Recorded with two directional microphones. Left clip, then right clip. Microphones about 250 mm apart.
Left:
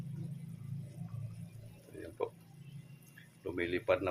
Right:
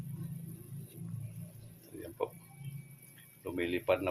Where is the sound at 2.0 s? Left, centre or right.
Centre.